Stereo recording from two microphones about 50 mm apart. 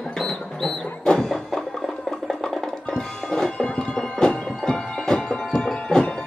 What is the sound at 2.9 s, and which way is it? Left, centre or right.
Music, centre.